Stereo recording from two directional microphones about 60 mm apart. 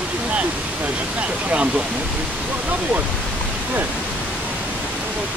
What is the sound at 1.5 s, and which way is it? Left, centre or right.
Speech, centre.